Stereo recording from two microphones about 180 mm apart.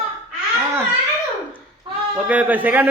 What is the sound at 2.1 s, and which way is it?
Speech, 5° right (ahead or behind).